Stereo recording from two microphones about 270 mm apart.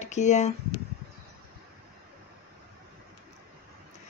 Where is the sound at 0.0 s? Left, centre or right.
Left.